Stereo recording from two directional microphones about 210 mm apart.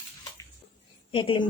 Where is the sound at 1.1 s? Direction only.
25° left (ahead or behind).